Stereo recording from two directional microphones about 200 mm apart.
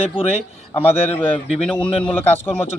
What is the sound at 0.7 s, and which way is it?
A man's voice, 10° left (ahead or behind).